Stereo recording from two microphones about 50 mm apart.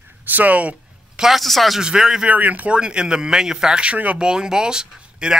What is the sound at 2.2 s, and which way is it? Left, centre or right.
Speech, right.